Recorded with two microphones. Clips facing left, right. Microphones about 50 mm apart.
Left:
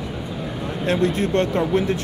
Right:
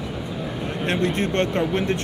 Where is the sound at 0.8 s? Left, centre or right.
Right.